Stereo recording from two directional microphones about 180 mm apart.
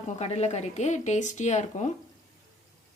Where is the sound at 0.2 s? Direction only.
35° left (ahead or behind).